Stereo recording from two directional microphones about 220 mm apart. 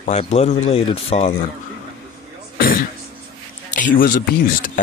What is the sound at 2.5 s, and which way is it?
Throat clearing, 40° left (ahead or behind).